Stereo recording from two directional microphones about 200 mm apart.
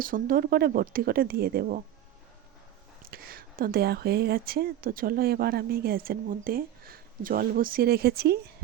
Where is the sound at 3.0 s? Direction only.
45° right (ahead or behind).